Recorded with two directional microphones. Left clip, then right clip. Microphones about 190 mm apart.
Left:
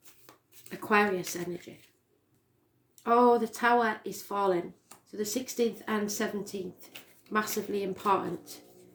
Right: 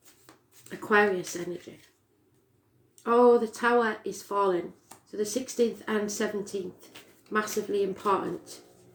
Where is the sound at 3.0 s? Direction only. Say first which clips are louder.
Right 2 dB; 30° left (ahead or behind).